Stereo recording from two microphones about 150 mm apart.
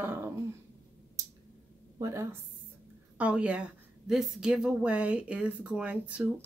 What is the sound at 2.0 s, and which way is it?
Speech, 20° right (ahead or behind).